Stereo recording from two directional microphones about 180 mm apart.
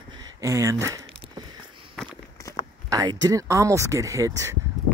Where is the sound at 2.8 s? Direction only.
20° right (ahead or behind).